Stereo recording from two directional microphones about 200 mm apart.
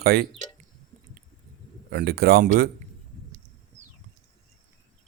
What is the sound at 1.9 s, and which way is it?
Speech, 55° right (ahead or behind).